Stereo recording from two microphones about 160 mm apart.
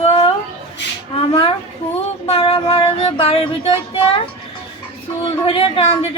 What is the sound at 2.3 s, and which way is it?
Speech, 35° left (ahead or behind).